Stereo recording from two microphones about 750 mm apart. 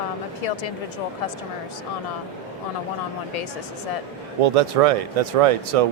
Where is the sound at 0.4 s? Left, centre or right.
Left.